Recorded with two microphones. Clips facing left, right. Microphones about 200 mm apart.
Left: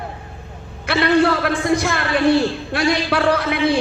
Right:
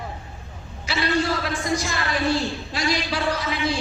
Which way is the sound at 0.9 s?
60° left (ahead or behind).